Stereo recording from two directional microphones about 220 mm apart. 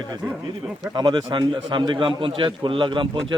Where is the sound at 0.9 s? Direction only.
20° right (ahead or behind).